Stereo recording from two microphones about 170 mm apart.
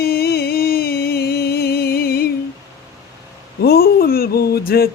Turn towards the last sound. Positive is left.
turn(degrees=65)  # may be behind; listen again after turning